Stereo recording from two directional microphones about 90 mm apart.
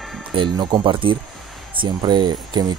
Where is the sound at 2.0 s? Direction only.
55° right (ahead or behind).